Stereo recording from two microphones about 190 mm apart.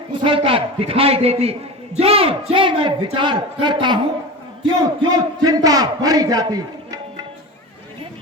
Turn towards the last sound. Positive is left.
turn(degrees=-20)  # may be behind; listen again after turning